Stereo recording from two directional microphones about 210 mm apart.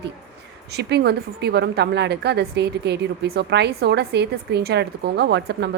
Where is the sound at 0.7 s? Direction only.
50° right (ahead or behind).